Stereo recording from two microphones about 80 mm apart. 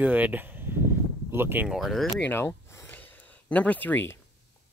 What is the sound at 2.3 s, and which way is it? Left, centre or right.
Speech, left.